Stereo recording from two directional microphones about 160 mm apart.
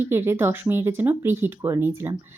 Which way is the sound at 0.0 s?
15° right (ahead or behind).